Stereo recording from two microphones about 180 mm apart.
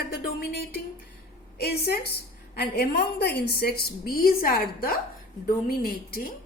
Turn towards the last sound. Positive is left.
turn(degrees=55)  # may be behind; listen again after turning